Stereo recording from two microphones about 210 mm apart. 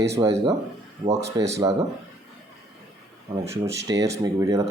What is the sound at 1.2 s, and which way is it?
Speech, 15° right (ahead or behind).